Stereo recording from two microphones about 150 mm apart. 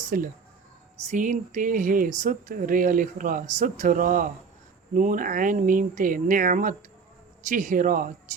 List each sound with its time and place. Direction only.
0.1 s speech: 65° right (ahead or behind)
1.0 s speech: 55° right (ahead or behind)